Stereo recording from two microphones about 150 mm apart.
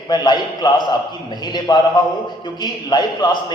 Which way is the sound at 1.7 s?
30° left (ahead or behind).